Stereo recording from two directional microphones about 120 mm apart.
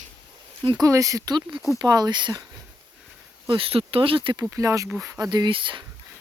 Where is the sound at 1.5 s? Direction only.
5° right (ahead or behind).